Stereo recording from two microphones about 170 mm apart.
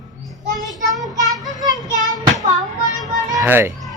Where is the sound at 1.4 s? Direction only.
20° right (ahead or behind).